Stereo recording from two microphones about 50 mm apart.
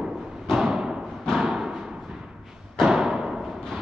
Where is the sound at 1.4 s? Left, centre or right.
Centre.